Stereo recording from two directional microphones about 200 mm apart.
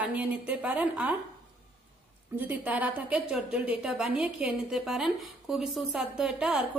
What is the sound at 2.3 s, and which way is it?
A woman's voice, 10° right (ahead or behind).